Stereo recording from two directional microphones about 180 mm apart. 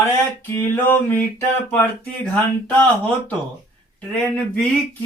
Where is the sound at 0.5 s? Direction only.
15° left (ahead or behind).